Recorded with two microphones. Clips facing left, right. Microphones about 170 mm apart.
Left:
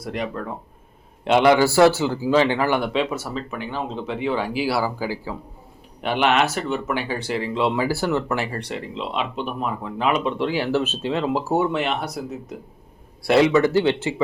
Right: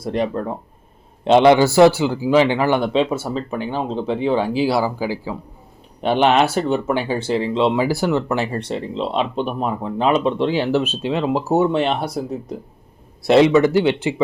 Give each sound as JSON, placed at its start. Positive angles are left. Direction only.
{"t": 0.0, "sound": "speech", "side_deg": -30}
{"t": 6.0, "sound": "speech", "side_deg": -30}